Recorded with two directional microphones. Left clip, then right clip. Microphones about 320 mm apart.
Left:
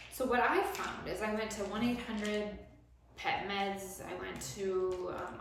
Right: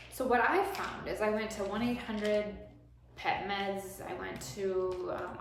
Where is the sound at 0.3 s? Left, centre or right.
Centre.